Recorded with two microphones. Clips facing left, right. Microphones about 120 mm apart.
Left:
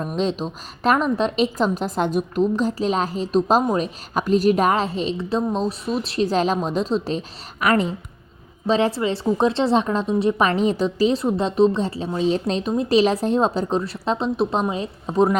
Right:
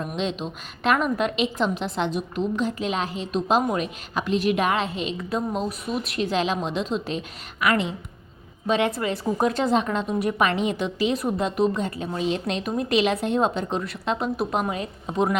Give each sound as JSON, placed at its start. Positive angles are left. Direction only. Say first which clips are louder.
{"t": 0.0, "sound": "a woman's voice", "louder": "left 4 dB", "side_deg": 35}
{"t": 8.6, "sound": "a woman's voice", "louder": "left 3 dB", "side_deg": 30}